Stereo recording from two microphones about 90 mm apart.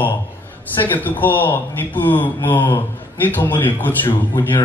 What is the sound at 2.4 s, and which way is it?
Speech, 55° left (ahead or behind).